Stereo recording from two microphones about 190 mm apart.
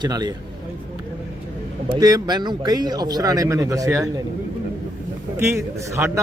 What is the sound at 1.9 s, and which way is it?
Speech, 20° right (ahead or behind).